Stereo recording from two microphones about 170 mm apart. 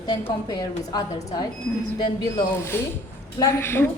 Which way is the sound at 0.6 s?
25° left (ahead or behind).